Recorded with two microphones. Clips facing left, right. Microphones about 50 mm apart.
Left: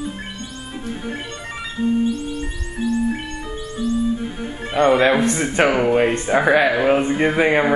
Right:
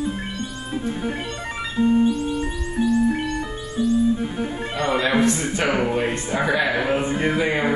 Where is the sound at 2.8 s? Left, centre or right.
Centre.